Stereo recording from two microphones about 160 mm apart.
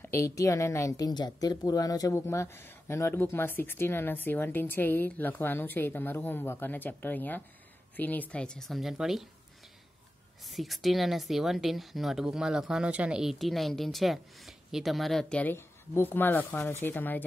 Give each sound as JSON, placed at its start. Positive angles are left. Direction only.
{"t": 0.0, "sound": "a sound", "side_deg": 15}
{"t": 0.4, "sound": "a woman's voice", "side_deg": 20}
{"t": 10.4, "sound": "a woman's voice", "side_deg": 0}